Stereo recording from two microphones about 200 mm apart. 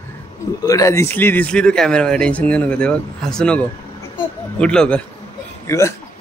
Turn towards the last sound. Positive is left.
turn(degrees=15)  # may be behind; listen again after turning